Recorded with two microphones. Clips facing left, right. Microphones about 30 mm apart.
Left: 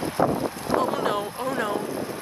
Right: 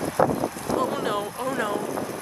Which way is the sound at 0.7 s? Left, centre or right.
Centre.